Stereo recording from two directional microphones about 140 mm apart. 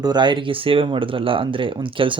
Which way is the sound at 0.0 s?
30° right (ahead or behind).